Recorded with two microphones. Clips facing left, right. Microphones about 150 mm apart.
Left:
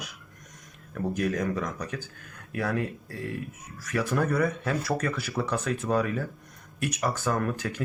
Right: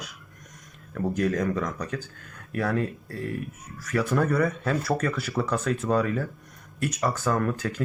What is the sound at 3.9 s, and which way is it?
Speech, 15° left (ahead or behind).